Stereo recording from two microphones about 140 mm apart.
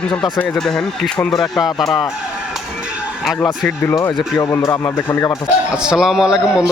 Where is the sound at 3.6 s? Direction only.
15° left (ahead or behind).